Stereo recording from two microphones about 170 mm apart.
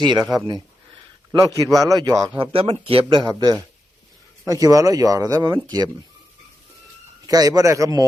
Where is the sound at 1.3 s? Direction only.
20° right (ahead or behind).